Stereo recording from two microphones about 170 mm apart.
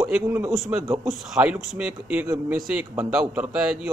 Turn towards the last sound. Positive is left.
turn(degrees=-5)  # may be behind; listen again after turning